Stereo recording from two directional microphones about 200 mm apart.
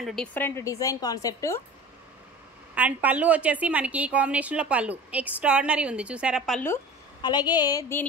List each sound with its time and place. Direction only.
0.0 s a woman's voice: 5° left (ahead or behind)
2.7 s a woman's voice: 5° right (ahead or behind)
7.2 s a sound: 20° left (ahead or behind)